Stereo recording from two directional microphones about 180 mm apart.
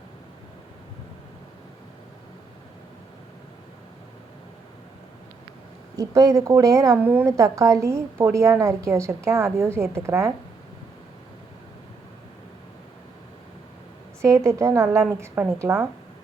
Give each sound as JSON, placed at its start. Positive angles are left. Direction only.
{"t": 6.0, "sound": "a woman's voice", "side_deg": -20}
{"t": 14.2, "sound": "a woman's voice", "side_deg": -15}